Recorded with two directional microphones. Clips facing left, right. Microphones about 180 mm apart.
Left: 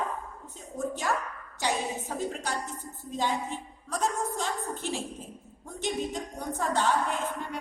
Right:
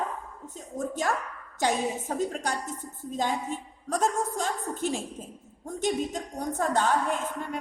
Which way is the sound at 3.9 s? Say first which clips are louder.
Right 3 dB; 45° right (ahead or behind).